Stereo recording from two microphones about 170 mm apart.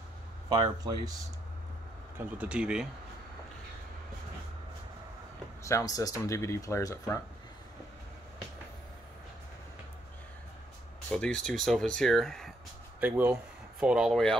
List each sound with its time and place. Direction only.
0.5 s speech: 25° right (ahead or behind)
2.1 s speech: 5° right (ahead or behind)
5.6 s speech: 20° left (ahead or behind)
11.1 s speech: 5° left (ahead or behind)
13.0 s speech: 10° right (ahead or behind)